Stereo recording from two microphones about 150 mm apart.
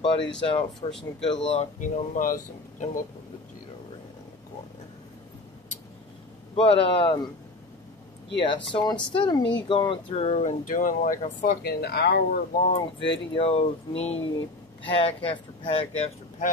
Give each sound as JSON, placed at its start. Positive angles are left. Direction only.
{"t": 0.5, "sound": "speech", "side_deg": 35}
{"t": 1.8, "sound": "speech", "side_deg": 60}
{"t": 6.5, "sound": "speech", "side_deg": 40}
{"t": 8.4, "sound": "speech", "side_deg": 35}
{"t": 10.7, "sound": "speech", "side_deg": 60}
{"t": 12.7, "sound": "speech", "side_deg": 35}